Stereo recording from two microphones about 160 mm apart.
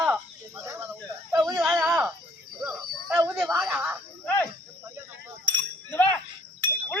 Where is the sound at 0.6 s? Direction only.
15° right (ahead or behind).